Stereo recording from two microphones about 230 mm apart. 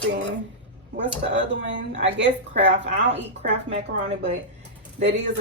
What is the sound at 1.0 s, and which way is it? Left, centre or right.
Speech, right.